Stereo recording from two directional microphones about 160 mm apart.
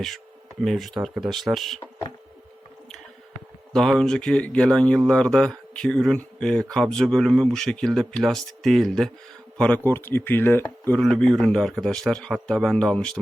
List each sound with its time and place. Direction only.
0.6 s speech: centre (ahead or behind)
1.8 s a sound: 30° left (ahead or behind)
3.7 s speech: 5° left (ahead or behind)